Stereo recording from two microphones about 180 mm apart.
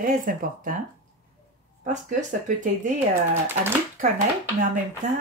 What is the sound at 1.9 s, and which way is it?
Speech, 45° right (ahead or behind).